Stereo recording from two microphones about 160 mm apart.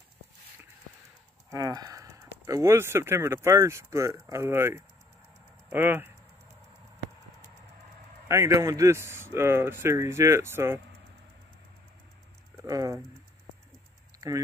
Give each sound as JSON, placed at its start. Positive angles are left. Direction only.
{"t": 1.5, "sound": "speech", "side_deg": -25}
{"t": 8.3, "sound": "speech", "side_deg": -20}
{"t": 12.6, "sound": "speech", "side_deg": -20}
{"t": 14.2, "sound": "speech", "side_deg": -20}